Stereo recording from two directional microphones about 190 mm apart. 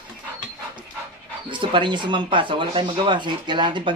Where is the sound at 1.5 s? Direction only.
25° right (ahead or behind).